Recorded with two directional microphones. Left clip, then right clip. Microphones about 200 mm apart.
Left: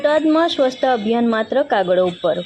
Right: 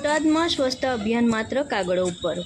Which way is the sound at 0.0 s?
Centre (ahead or behind).